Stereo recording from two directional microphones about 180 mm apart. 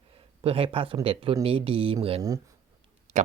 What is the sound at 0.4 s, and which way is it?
Speech, 30° right (ahead or behind).